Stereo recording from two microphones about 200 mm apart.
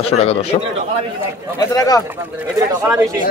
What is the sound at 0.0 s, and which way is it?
Speech, 30° left (ahead or behind).